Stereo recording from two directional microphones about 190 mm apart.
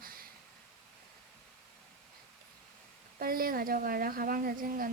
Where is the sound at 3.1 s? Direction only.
50° right (ahead or behind).